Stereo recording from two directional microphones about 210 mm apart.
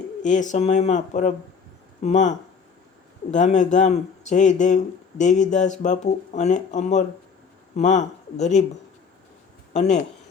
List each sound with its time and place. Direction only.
0.2 s speech: 35° left (ahead or behind)
3.3 s speech: 35° left (ahead or behind)
9.7 s speech: 35° left (ahead or behind)